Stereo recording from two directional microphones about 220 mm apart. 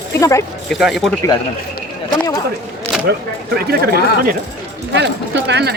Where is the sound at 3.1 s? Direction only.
50° right (ahead or behind).